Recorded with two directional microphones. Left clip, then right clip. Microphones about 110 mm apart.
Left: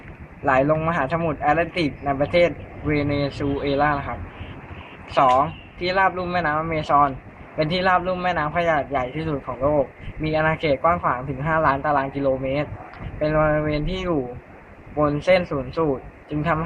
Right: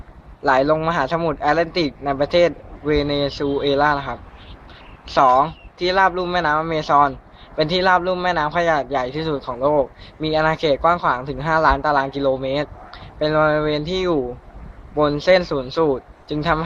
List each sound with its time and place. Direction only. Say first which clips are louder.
0.4 s a man's voice: right 3 dB; 25° right (ahead or behind)